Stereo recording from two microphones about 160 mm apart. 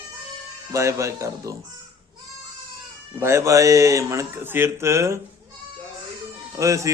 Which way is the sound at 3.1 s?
15° right (ahead or behind).